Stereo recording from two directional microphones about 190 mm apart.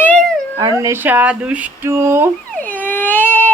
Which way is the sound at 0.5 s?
20° right (ahead or behind).